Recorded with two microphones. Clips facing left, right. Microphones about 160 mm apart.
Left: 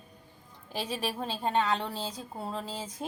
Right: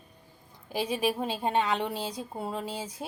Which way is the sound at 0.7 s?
10° right (ahead or behind).